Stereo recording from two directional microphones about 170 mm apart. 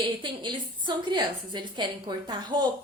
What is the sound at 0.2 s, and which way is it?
A woman's voice, 25° right (ahead or behind).